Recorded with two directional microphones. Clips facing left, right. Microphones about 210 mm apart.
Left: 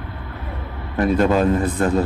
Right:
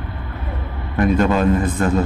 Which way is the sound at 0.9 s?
35° left (ahead or behind).